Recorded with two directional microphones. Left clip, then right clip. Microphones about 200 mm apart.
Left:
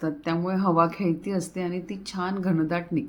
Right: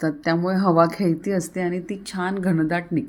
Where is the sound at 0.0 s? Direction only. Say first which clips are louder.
Right 6 dB; 30° right (ahead or behind).